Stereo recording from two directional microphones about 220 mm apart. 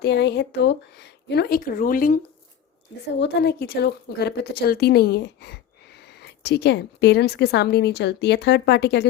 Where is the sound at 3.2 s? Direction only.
45° left (ahead or behind).